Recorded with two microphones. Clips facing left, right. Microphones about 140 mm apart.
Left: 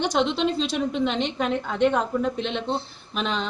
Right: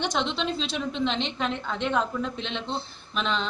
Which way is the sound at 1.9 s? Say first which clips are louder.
Left 3 dB; 40° left (ahead or behind).